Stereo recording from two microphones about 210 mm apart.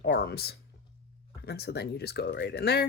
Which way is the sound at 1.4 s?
50° left (ahead or behind).